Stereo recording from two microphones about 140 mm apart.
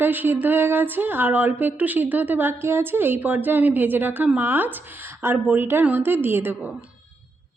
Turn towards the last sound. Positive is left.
turn(degrees=-10)  # may be behind; listen again after turning